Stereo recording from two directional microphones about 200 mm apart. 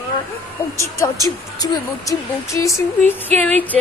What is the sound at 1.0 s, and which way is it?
Speech, 15° left (ahead or behind).